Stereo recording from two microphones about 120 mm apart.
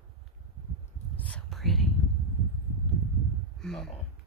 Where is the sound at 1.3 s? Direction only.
5° left (ahead or behind).